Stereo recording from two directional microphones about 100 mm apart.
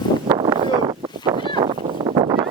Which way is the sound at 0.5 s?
60° right (ahead or behind).